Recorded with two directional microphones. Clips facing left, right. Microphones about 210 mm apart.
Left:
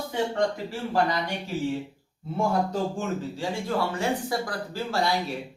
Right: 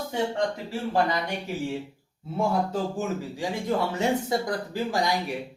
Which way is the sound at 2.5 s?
5° right (ahead or behind).